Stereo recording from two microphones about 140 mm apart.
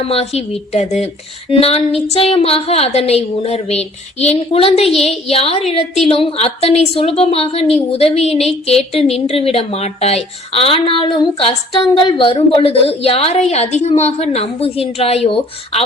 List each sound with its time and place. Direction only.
0.0 s a woman's voice: 45° left (ahead or behind)